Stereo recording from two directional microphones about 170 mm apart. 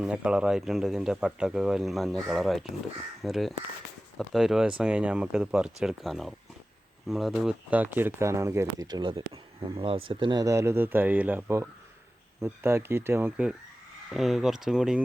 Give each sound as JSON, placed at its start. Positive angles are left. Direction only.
{"t": 0.0, "sound": "speech", "side_deg": -5}